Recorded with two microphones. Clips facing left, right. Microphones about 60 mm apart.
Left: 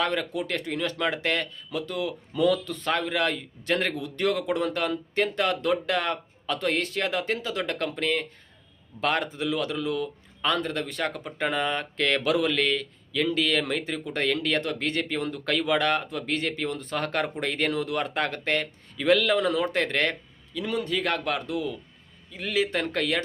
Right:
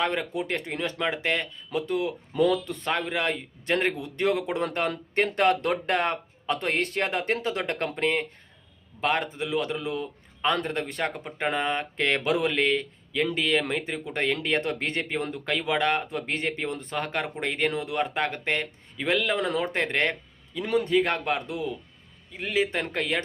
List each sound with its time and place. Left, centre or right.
0.0 s speech: right
4.9 s speech: right
9.0 s speech: centre
16.9 s speech: centre